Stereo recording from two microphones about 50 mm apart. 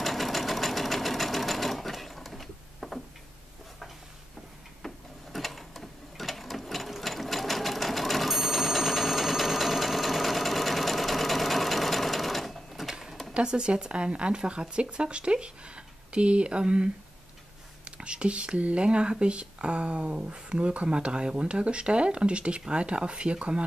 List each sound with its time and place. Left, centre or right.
0.0 s sewing machine: centre
4.8 s gears: centre
12.9 s a sound: centre
13.3 s speech: centre